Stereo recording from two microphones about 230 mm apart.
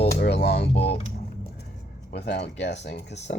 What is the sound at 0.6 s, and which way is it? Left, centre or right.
Speech, left.